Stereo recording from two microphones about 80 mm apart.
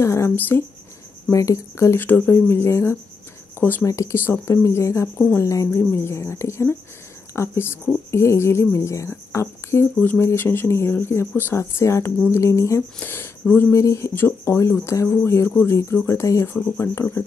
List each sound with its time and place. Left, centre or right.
0.0 s speech: left
1.3 s speech: left
3.8 s speech: left
9.9 s speech: left
13.0 s speech: left